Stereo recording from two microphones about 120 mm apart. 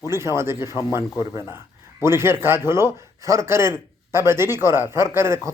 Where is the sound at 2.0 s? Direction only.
20° right (ahead or behind).